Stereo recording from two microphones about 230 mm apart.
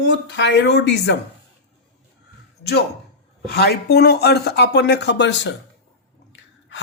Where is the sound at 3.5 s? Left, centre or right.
Left.